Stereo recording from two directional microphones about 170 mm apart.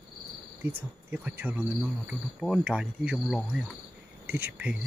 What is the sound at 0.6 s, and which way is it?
Speech, 10° right (ahead or behind).